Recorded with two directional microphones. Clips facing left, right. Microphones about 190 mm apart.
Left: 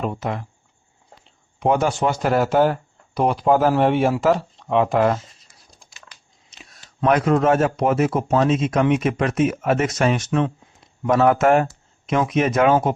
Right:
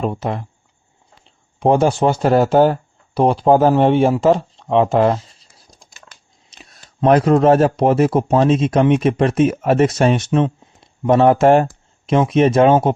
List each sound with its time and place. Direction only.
0.0 s speech: 30° right (ahead or behind)
1.5 s speech: 30° right (ahead or behind)
3.2 s a sound: 30° right (ahead or behind)
7.0 s speech: 35° right (ahead or behind)